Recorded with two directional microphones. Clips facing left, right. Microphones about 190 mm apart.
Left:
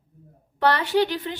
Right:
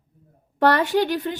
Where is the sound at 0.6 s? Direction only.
45° right (ahead or behind).